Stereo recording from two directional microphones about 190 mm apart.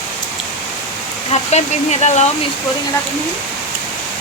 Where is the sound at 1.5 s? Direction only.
35° left (ahead or behind).